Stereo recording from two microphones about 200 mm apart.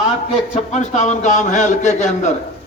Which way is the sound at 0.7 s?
35° left (ahead or behind).